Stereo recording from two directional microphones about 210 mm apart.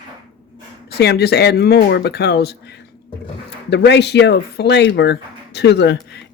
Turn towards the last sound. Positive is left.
turn(degrees=55)  # may be behind; listen again after turning